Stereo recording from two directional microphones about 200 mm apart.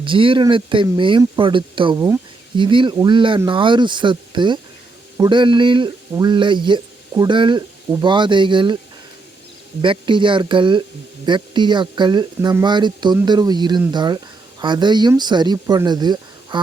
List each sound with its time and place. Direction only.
0.0 s a man's voice: 25° right (ahead or behind)
9.8 s a man's voice: 25° right (ahead or behind)